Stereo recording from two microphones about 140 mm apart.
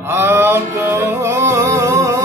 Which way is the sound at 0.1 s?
15° right (ahead or behind).